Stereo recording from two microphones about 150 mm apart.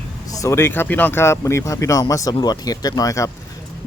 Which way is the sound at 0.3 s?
20° left (ahead or behind).